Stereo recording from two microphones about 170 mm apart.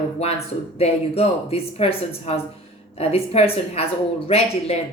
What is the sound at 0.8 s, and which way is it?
Speech, 35° left (ahead or behind).